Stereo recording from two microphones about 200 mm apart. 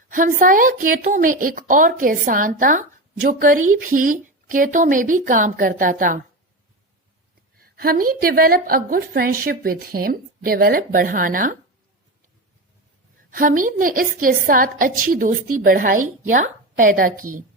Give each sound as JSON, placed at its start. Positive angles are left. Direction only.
{"t": 0.1, "sound": "a woman's voice", "side_deg": -45}
{"t": 7.8, "sound": "a woman's voice", "side_deg": -45}
{"t": 13.3, "sound": "a woman's voice", "side_deg": -45}